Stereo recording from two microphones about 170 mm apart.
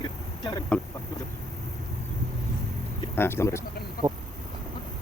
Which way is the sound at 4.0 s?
60° left (ahead or behind).